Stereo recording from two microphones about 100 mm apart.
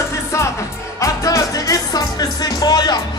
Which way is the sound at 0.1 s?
30° left (ahead or behind).